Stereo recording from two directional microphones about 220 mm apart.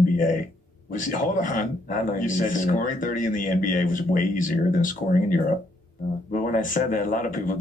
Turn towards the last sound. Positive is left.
turn(degrees=40)  # may be behind; listen again after turning